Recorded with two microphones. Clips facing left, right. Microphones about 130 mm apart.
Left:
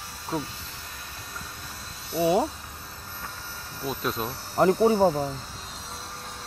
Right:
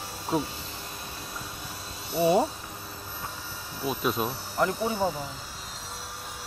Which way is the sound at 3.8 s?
5° right (ahead or behind).